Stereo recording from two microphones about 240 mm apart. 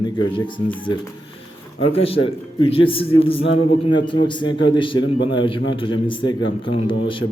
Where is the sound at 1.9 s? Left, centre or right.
Left.